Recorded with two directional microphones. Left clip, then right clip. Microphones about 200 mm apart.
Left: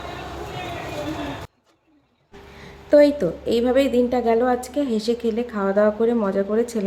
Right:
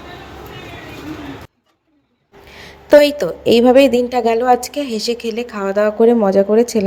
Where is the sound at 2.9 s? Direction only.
40° right (ahead or behind).